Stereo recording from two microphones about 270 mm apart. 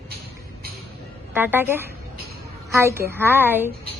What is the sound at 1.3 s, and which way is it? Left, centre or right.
A woman's voice, centre.